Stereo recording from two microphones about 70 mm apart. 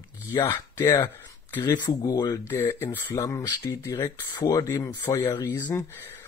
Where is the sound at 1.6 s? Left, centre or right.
Left.